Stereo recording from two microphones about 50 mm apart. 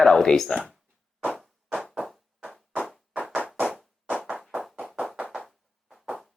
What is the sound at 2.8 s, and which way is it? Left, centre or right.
Music, centre.